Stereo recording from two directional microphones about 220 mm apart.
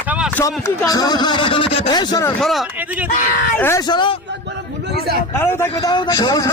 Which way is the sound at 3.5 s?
10° left (ahead or behind).